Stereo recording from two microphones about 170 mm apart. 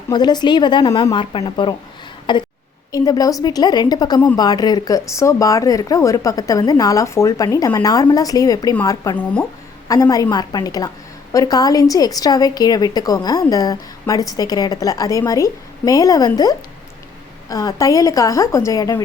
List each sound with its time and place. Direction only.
0.1 s a woman's voice: 25° left (ahead or behind)
9.1 s speech: 10° left (ahead or behind)
9.9 s a woman's voice: 20° left (ahead or behind)